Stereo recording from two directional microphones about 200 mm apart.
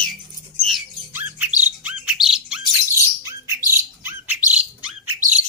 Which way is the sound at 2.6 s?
15° right (ahead or behind).